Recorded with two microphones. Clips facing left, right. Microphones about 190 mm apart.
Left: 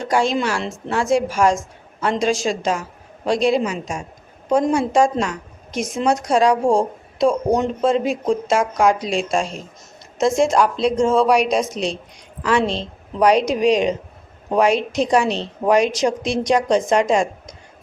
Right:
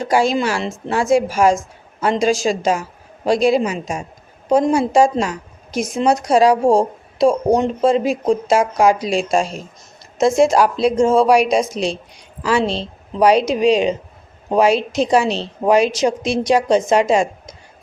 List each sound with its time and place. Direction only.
0.0 s a woman's voice: 5° right (ahead or behind)
6.6 s a woman's voice: 35° right (ahead or behind)
7.9 s a woman's voice: centre (ahead or behind)
12.5 s a woman's voice: 30° right (ahead or behind)
15.9 s a woman's voice: centre (ahead or behind)